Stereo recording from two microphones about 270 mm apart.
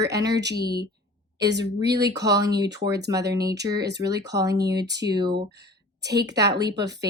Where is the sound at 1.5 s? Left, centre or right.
Right.